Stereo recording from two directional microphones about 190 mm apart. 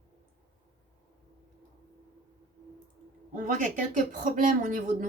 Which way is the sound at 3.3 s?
45° right (ahead or behind).